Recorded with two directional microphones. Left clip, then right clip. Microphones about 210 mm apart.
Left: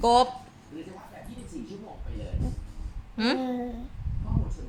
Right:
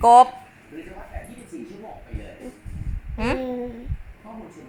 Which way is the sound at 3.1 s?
15° left (ahead or behind).